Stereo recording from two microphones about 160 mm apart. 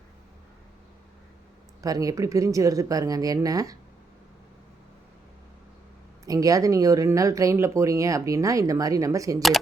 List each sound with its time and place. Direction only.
1.8 s speech: 20° right (ahead or behind)
6.2 s speech: 20° right (ahead or behind)